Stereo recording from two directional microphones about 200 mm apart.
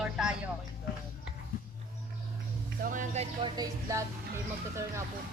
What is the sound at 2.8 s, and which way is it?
Music, 40° right (ahead or behind).